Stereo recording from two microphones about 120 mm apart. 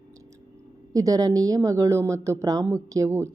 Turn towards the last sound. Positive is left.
turn(degrees=-25)  # may be behind; listen again after turning